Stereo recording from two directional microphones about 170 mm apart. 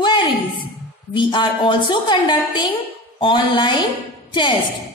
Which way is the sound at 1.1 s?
30° left (ahead or behind).